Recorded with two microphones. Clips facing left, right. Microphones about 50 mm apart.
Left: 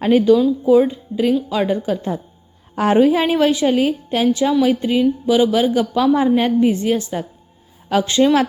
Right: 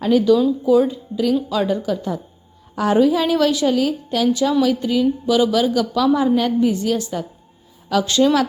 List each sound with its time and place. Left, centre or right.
0.0 s a woman's voice: left